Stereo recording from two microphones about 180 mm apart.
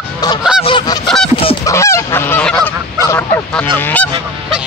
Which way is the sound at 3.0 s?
15° left (ahead or behind).